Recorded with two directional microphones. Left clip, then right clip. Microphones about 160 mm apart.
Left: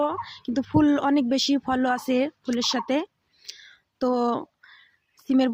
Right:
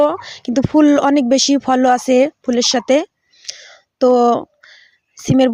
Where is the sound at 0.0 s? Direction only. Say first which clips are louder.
Right 11 dB; 50° right (ahead or behind).